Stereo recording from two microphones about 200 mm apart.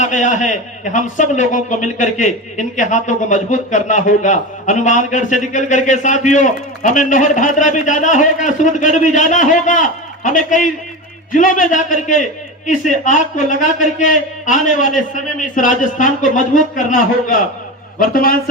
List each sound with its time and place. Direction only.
0.0 s a man's voice: 35° left (ahead or behind)